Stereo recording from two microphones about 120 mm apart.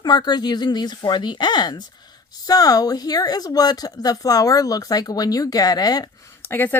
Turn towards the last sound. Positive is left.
turn(degrees=20)  # may be behind; listen again after turning